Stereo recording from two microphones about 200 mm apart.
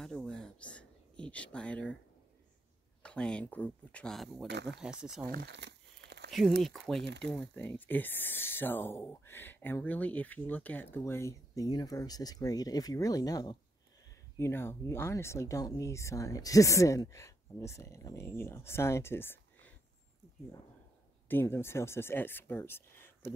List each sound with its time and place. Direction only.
0.0 s a sound: 5° left (ahead or behind)
3.0 s speech: 5° left (ahead or behind)
5.2 s crumpling: 50° right (ahead or behind)
6.6 s speech: centre (ahead or behind)
21.3 s speech: 10° left (ahead or behind)